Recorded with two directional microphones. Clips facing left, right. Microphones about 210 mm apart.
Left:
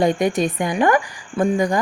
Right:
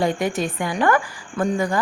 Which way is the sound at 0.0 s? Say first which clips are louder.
Left 4 dB; 20° left (ahead or behind).